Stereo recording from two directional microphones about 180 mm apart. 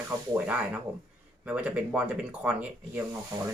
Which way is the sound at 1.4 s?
5° right (ahead or behind).